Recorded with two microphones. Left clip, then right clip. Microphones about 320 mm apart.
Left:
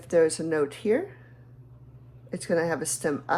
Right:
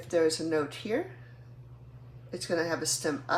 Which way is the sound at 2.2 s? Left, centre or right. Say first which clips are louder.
Left 4 dB; left.